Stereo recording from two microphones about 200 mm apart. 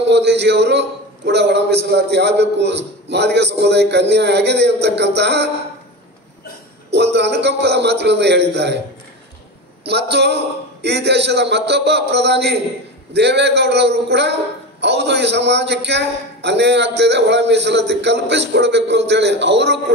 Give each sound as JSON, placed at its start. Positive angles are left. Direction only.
{"t": 0.0, "sound": "speech", "side_deg": -60}
{"t": 6.9, "sound": "speech", "side_deg": -60}
{"t": 9.8, "sound": "speech", "side_deg": -55}